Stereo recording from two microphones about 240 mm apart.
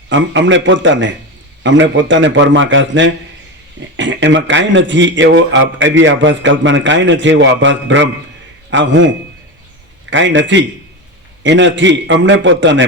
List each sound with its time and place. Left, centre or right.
0.1 s speech: right
10.1 s speech: right